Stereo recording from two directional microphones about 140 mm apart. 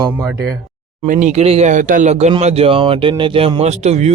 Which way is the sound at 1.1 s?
60° right (ahead or behind).